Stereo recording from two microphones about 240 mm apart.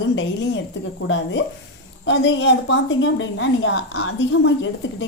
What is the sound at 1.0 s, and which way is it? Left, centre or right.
A woman's voice, left.